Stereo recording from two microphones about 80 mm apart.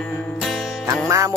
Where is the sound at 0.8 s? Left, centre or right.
Right.